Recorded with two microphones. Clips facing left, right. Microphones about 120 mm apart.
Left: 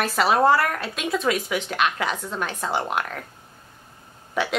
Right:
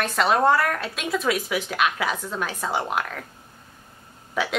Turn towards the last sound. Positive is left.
turn(degrees=0)  # may be behind; listen again after turning